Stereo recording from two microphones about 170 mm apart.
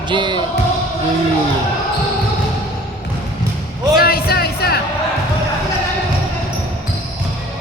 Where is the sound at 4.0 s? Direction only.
65° left (ahead or behind).